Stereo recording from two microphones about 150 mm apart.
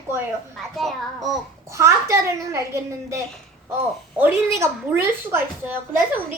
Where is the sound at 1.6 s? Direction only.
20° right (ahead or behind).